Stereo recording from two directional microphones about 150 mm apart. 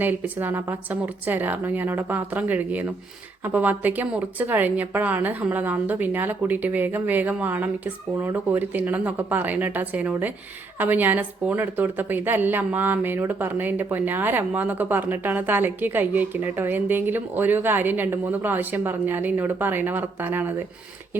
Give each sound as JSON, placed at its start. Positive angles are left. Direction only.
{"t": 0.0, "sound": "a woman's voice", "side_deg": -10}